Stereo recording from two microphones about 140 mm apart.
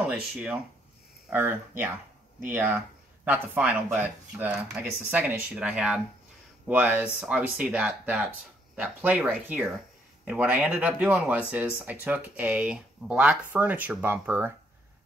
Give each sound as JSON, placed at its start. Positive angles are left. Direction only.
{"t": 0.1, "sound": "speech", "side_deg": -5}